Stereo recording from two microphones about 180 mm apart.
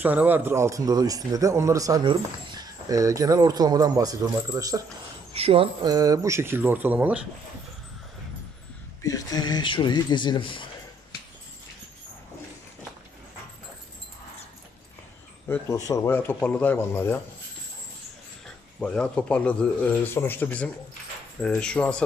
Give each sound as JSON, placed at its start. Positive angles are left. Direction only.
{"t": 0.0, "sound": "a man's voice", "side_deg": -10}
{"t": 5.3, "sound": "speech", "side_deg": -35}
{"t": 9.0, "sound": "speech", "side_deg": 20}
{"t": 15.4, "sound": "speech", "side_deg": 15}
{"t": 18.4, "sound": "speech", "side_deg": 5}